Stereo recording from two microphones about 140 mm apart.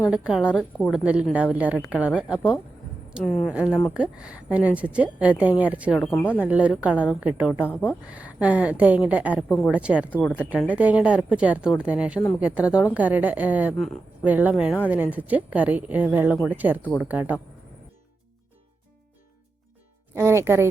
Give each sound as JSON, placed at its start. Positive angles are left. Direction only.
{"t": 0.1, "sound": "a woman's voice", "side_deg": -5}
{"t": 7.6, "sound": "speech", "side_deg": 15}
{"t": 8.1, "sound": "a woman's voice", "side_deg": -10}
{"t": 20.1, "sound": "speech", "side_deg": -20}